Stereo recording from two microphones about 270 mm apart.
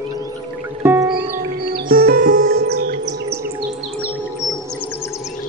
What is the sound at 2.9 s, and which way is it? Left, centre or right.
Bird, right.